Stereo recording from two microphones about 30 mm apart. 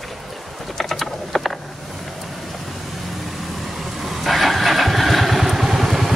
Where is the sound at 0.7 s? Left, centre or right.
Centre.